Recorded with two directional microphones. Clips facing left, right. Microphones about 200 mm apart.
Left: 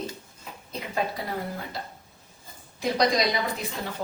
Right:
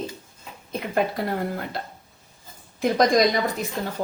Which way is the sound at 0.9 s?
60° right (ahead or behind).